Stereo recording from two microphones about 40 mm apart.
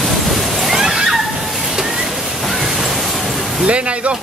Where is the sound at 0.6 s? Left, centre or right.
Centre.